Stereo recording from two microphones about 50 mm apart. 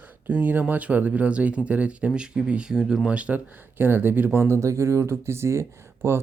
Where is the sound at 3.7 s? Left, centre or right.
Right.